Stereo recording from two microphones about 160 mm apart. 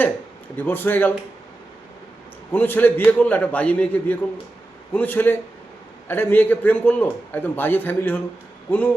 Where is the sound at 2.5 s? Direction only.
10° left (ahead or behind).